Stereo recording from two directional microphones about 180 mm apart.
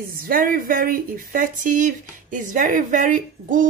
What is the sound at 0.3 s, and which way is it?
A woman's voice, 50° right (ahead or behind).